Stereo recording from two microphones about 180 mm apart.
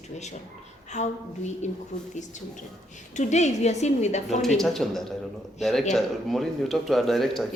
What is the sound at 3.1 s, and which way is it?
A woman's voice, 40° left (ahead or behind).